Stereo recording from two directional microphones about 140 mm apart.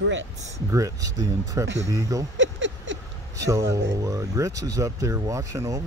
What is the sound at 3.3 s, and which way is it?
Speech, 20° right (ahead or behind).